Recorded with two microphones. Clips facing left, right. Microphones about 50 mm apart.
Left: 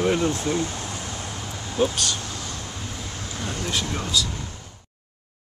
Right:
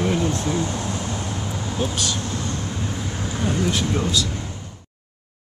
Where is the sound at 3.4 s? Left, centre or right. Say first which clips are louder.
Right 7 dB; centre.